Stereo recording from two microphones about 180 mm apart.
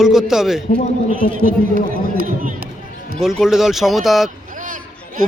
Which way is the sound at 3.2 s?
Centre (ahead or behind).